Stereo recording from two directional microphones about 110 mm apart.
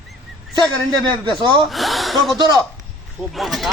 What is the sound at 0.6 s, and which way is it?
A man's voice, 45° right (ahead or behind).